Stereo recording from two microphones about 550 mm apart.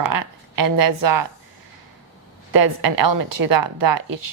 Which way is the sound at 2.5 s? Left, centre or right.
Right.